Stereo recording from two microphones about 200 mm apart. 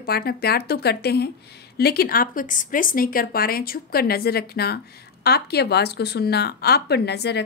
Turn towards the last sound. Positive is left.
turn(degrees=55)  # may be behind; listen again after turning